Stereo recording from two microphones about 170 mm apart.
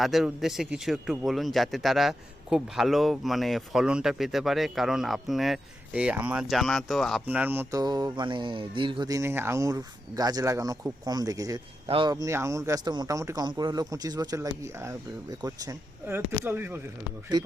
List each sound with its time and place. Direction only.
0.0 s a man's voice: centre (ahead or behind)